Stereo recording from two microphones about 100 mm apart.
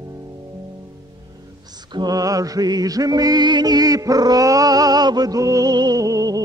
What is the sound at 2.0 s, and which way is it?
Music, 40° right (ahead or behind).